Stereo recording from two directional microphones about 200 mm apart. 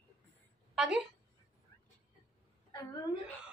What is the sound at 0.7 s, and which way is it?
Speech, centre (ahead or behind).